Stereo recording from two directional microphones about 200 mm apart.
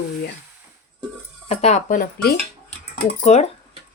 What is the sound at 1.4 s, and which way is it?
Speech, 30° left (ahead or behind).